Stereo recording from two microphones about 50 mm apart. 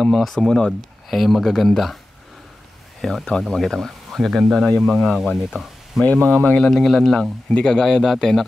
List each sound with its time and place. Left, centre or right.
0.0 s speech: centre
3.0 s speech: centre
4.3 s speech: centre
6.2 s speech: left
6.6 s speech: centre